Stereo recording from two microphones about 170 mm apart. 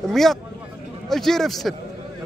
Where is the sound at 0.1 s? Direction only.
Centre (ahead or behind).